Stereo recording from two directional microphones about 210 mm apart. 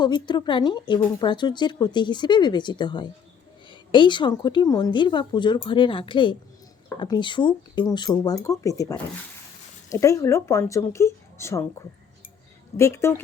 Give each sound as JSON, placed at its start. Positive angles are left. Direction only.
{"t": 0.0, "sound": "speech", "side_deg": 20}
{"t": 12.7, "sound": "speech", "side_deg": 15}